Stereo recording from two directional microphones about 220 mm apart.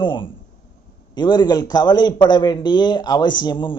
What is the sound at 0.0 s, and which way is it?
A man's voice, 20° left (ahead or behind).